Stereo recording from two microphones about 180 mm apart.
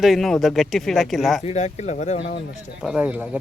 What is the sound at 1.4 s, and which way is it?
Speech, 40° left (ahead or behind).